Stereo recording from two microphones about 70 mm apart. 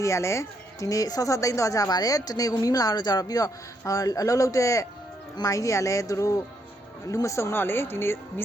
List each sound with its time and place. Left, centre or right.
0.0 s speech: left
7.5 s speech: left